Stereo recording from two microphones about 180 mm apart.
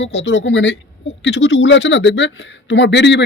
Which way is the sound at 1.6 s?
85° left.